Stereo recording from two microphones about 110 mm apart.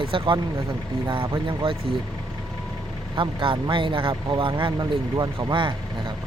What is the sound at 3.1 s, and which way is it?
Speech, 50° right (ahead or behind).